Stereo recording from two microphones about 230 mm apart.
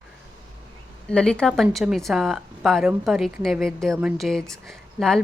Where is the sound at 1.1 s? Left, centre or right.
Centre.